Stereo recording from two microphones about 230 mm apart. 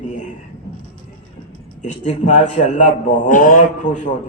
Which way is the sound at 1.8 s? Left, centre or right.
Left.